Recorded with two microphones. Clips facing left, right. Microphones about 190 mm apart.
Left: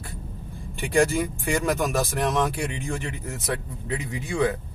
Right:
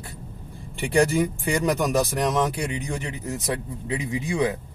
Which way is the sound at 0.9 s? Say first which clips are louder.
Right 1 dB; 15° right (ahead or behind).